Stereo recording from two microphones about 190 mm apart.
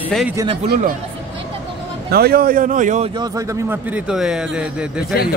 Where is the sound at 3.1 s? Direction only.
20° right (ahead or behind).